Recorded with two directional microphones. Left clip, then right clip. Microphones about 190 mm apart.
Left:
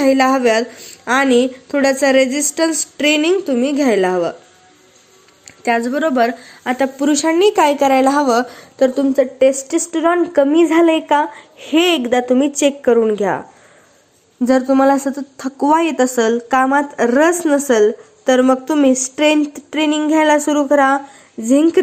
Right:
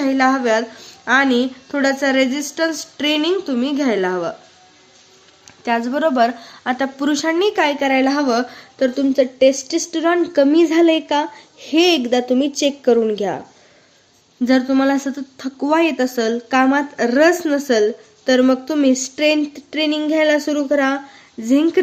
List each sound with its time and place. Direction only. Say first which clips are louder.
0.0 s a woman's voice: left 4 dB; 15° left (ahead or behind)
5.6 s a woman's voice: left 2 dB; 10° left (ahead or behind)
9.5 s a woman's voice: even; 25° left (ahead or behind)
9.9 s a woman's voice: left 2 dB; 15° right (ahead or behind)
14.4 s a woman's voice: left 4 dB; 10° left (ahead or behind)
14.9 s speech: left 3 dB; 5° right (ahead or behind)
15.4 s a woman's voice: left 2 dB; 10° left (ahead or behind)
16.1 s speech: left 3 dB; 5° right (ahead or behind)
21.4 s a woman's voice: left 3 dB; 10° left (ahead or behind)